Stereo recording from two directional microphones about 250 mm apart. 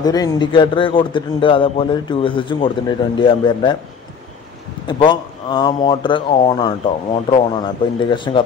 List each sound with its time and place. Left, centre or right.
0.0 s a man's voice: centre
4.8 s a man's voice: centre